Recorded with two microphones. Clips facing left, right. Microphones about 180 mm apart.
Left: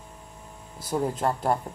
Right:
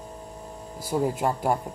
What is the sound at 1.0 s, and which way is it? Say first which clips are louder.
Speech: right 1 dB; 10° right (ahead or behind).